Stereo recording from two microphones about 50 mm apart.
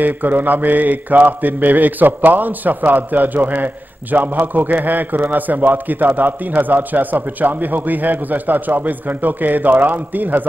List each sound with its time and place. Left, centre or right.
0.0 s mantra: right